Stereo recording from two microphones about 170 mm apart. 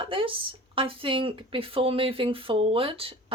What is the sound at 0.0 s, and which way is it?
Speech, 30° right (ahead or behind).